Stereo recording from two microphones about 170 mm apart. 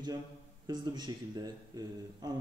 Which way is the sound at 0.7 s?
25° right (ahead or behind).